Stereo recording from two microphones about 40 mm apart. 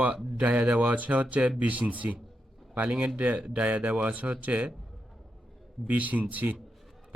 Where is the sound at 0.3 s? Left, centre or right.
Right.